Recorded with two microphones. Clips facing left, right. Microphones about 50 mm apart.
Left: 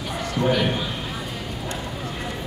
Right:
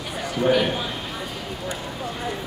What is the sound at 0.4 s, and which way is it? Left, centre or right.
Speech, centre.